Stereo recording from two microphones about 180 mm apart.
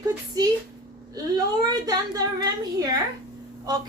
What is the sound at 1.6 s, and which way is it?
A woman's voice, 20° right (ahead or behind).